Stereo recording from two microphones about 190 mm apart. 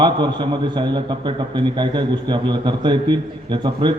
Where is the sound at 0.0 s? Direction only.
25° right (ahead or behind).